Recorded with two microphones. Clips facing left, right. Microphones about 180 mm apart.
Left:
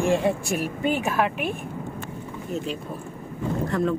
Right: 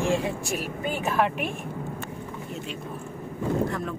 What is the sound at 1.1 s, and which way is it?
Speech, centre (ahead or behind).